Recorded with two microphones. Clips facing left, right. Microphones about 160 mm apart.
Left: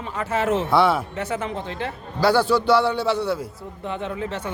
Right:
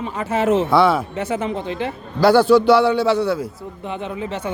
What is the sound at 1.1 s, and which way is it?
Speech, 20° right (ahead or behind).